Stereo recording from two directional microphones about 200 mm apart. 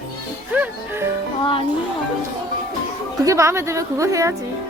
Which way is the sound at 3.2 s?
15° right (ahead or behind).